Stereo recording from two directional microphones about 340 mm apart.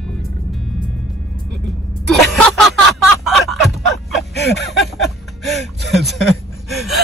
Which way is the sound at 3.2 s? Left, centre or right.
Centre.